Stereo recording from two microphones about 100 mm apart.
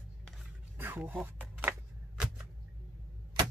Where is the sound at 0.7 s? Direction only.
20° right (ahead or behind).